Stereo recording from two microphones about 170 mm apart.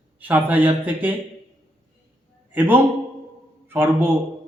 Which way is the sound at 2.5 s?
10° right (ahead or behind).